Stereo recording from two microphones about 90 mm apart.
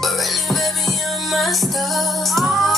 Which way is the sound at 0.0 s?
Centre (ahead or behind).